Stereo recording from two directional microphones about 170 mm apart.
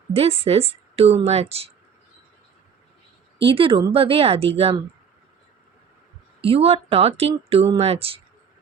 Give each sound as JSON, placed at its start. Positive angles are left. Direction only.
{"t": 0.1, "sound": "a woman's voice", "side_deg": -35}
{"t": 3.3, "sound": "a woman's voice", "side_deg": -30}
{"t": 6.4, "sound": "a woman's voice", "side_deg": -35}